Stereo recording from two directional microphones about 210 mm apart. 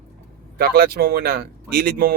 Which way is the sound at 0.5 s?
45° right (ahead or behind).